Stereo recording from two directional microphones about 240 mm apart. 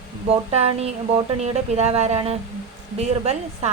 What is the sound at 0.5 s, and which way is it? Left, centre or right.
Speech, right.